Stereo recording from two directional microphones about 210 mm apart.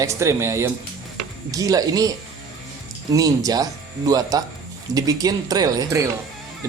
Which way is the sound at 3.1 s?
15° right (ahead or behind).